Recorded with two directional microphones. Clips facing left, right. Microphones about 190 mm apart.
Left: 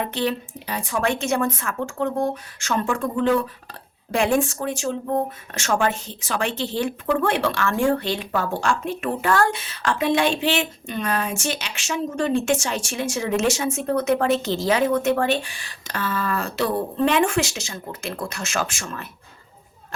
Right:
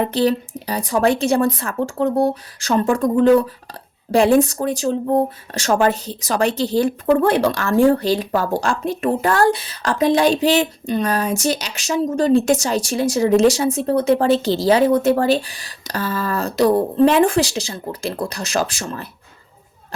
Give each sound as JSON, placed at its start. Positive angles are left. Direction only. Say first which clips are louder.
{"t": 0.0, "sound": "speech", "louder": "right 7 dB", "side_deg": -35}